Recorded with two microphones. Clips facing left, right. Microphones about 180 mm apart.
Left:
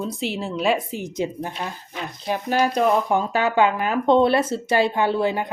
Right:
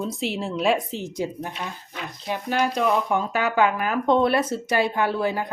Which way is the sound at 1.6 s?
30° left (ahead or behind).